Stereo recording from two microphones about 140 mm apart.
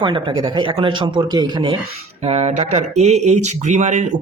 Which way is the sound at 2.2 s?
50° right (ahead or behind).